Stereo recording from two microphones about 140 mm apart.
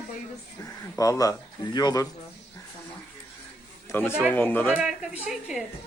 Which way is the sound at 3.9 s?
15° left (ahead or behind).